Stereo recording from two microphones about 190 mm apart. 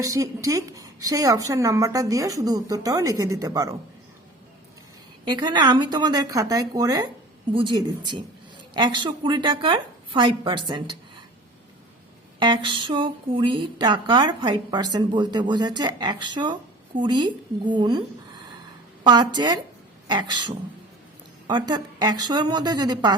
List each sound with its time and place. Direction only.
0.0 s a woman's voice: 15° right (ahead or behind)
5.2 s speech: 25° right (ahead or behind)
12.4 s speech: 25° right (ahead or behind)
19.0 s speech: 25° right (ahead or behind)